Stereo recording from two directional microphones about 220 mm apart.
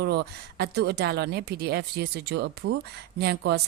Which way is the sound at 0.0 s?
50° right (ahead or behind).